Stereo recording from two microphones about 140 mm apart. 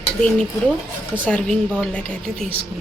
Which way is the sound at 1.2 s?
10° left (ahead or behind).